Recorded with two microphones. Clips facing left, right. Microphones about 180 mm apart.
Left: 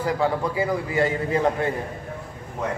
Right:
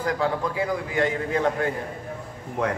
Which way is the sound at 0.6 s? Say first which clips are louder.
Left 3 dB; 5° left (ahead or behind).